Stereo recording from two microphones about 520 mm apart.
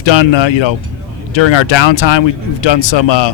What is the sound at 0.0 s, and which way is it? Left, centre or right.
Speech, left.